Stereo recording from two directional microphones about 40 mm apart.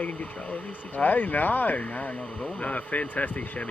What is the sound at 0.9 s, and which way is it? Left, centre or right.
Speech, left.